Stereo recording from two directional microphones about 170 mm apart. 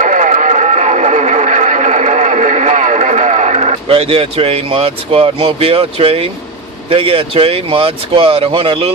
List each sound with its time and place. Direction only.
0.0 s radio: 50° right (ahead or behind)
6.9 s speech: 35° right (ahead or behind)